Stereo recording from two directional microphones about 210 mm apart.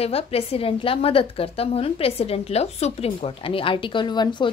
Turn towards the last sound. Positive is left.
turn(degrees=20)  # may be behind; listen again after turning